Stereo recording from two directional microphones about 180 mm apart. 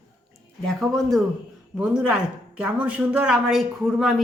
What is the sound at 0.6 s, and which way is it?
A woman's voice, centre (ahead or behind).